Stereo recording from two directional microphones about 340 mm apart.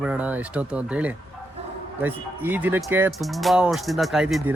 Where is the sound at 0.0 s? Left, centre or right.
Centre.